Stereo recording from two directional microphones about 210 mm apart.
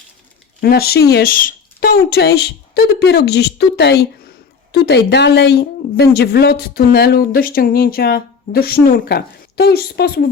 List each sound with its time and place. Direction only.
0.6 s a woman's voice: 45° left (ahead or behind)